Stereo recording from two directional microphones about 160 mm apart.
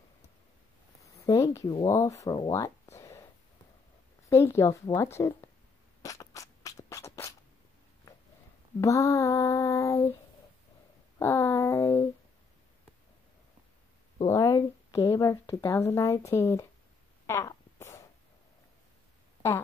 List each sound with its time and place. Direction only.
1.2 s female singing: 20° left (ahead or behind)
2.2 s a sound: 25° left (ahead or behind)
4.3 s speech: 15° left (ahead or behind)
6.0 s a sound: 20° left (ahead or behind)
8.8 s female singing: 20° left (ahead or behind)
11.1 s speech: 15° left (ahead or behind)
14.2 s speech: 20° left (ahead or behind)
17.3 s fart: 20° left (ahead or behind)